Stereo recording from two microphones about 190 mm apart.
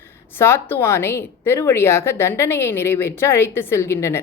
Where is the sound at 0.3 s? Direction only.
10° left (ahead or behind).